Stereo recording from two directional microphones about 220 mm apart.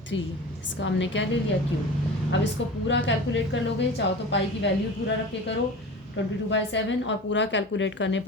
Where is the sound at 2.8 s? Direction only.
55° left (ahead or behind).